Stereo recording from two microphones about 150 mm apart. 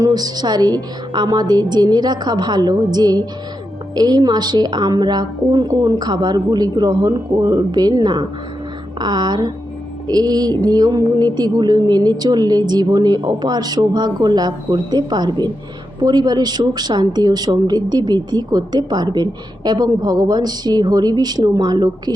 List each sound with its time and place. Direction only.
0.0 s speech: 25° right (ahead or behind)